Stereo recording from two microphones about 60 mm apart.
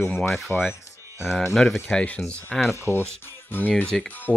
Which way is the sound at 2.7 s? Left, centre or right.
Left.